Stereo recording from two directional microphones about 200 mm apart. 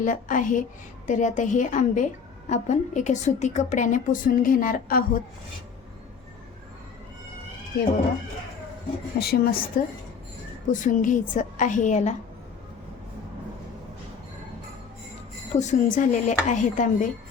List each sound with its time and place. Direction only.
0.0 s a woman's voice: 40° left (ahead or behind)
9.1 s a woman's voice: 50° left (ahead or behind); by 12.1 s 35° left (ahead or behind)
15.5 s a woman's voice: 35° left (ahead or behind)